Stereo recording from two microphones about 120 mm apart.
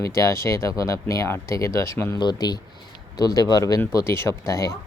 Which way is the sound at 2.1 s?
35° left (ahead or behind).